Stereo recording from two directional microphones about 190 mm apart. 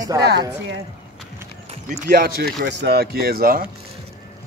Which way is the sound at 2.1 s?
50° right (ahead or behind).